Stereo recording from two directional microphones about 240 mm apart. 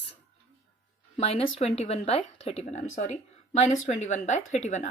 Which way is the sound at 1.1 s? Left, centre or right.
Left.